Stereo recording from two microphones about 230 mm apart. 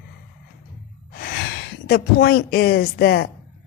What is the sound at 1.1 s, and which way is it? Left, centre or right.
Speech, left.